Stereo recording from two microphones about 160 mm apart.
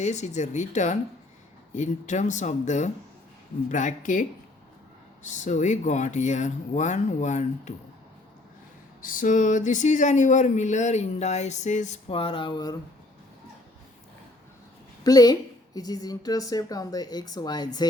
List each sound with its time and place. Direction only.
0.0 s speech: 45° left (ahead or behind)
9.0 s speech: 60° left (ahead or behind); by 12.7 s 30° left (ahead or behind)
15.0 s a woman's voice: 25° left (ahead or behind)